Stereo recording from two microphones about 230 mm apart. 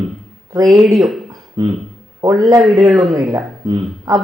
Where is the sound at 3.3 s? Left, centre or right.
Centre.